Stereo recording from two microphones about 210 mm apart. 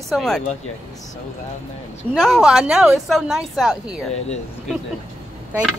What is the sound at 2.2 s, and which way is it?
Speech, centre (ahead or behind).